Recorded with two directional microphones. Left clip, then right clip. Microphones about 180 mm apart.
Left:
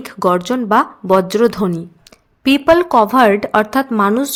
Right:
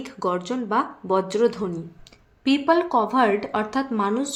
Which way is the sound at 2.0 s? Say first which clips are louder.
Left 9 dB; 45° left (ahead or behind).